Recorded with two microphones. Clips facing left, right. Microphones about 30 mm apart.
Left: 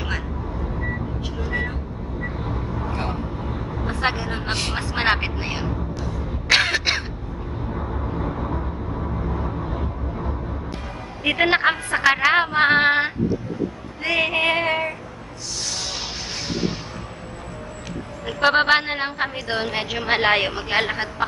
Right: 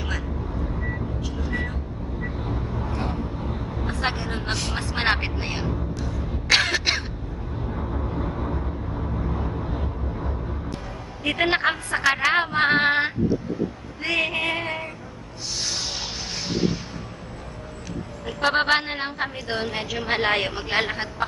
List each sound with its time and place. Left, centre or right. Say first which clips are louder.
1.4 s vehicle: left 4 dB; centre
4.5 s vehicle: left 3 dB; left
4.7 s music: left 2 dB; centre
7.7 s vehicle: left 1 dB; centre
11.3 s a woman's voice: left 3 dB; centre
14.4 s female singing: left 6 dB; left
14.7 s child singing: left 7 dB; left
18.4 s a woman's voice: left 4 dB; centre
20.4 s a woman's voice: left 2 dB; centre